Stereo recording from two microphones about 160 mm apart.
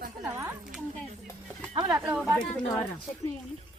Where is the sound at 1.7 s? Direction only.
30° right (ahead or behind).